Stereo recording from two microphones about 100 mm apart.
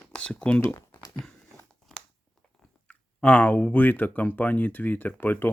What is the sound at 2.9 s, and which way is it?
Speech, 10° left (ahead or behind).